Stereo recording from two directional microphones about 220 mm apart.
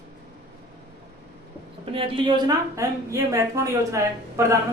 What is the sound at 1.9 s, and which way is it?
A woman's voice, 25° right (ahead or behind).